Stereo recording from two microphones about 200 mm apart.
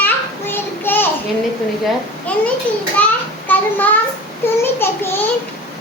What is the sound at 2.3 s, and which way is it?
Speech, 5° left (ahead or behind).